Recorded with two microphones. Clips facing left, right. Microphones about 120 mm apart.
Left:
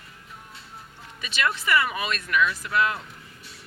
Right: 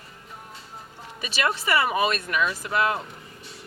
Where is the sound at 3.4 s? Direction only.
Centre (ahead or behind).